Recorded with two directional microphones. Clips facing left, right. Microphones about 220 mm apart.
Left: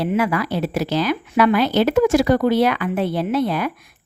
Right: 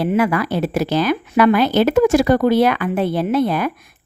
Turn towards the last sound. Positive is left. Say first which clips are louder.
# right 3 dB
turn(degrees=-50)  # may be behind; listen again after turning